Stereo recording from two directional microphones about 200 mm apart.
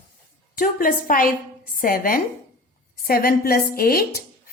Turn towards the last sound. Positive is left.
turn(degrees=50)  # may be behind; listen again after turning